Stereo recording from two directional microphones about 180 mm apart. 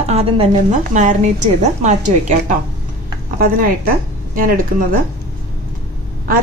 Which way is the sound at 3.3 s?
50° right (ahead or behind).